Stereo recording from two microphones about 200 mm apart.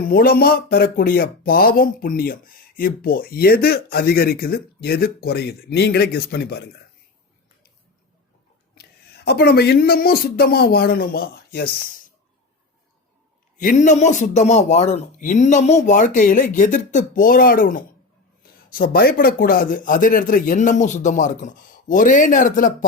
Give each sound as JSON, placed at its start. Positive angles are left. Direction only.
{"t": 0.0, "sound": "speech", "side_deg": 45}
{"t": 8.7, "sound": "speech", "side_deg": 55}
{"t": 13.6, "sound": "speech", "side_deg": 40}